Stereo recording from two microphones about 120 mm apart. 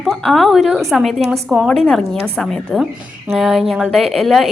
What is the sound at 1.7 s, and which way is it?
Speech, 5° left (ahead or behind).